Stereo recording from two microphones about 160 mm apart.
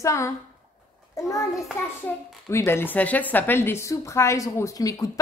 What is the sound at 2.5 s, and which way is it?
A woman's voice, 15° left (ahead or behind).